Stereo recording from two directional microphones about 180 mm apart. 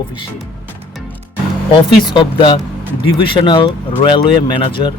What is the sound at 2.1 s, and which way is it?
Speech, 30° left (ahead or behind).